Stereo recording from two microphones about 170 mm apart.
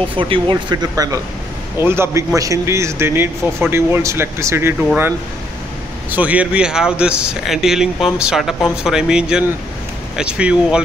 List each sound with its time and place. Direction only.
0.2 s speech: 30° right (ahead or behind); by 10.8 s 5° right (ahead or behind)